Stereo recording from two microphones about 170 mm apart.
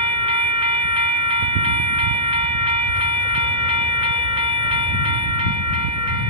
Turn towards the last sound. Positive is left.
turn(degrees=-30)  # may be behind; listen again after turning